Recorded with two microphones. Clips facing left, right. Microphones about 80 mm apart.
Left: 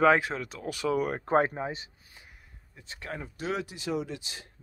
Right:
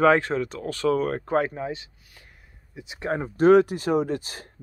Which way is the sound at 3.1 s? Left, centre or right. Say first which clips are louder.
Right 17 dB; right.